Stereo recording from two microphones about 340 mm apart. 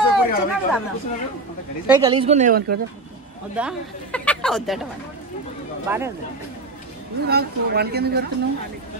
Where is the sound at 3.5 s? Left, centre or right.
Centre.